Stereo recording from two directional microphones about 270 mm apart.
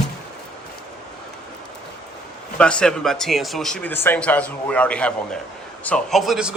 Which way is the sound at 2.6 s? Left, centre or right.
Centre.